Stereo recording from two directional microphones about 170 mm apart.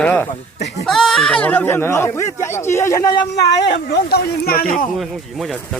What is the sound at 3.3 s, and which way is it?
Speech, 85° left.